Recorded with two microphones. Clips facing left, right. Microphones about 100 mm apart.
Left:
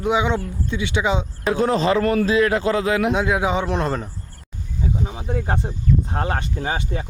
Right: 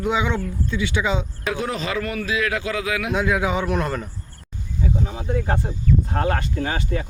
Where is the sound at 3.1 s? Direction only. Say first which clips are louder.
Left 1 dB; 25° left (ahead or behind).